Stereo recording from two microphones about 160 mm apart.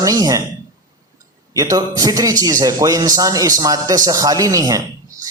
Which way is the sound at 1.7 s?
25° right (ahead or behind).